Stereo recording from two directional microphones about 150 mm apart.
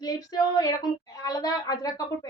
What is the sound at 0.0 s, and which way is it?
Speech, 25° left (ahead or behind).